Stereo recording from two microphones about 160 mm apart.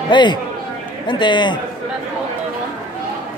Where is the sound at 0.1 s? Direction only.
30° left (ahead or behind).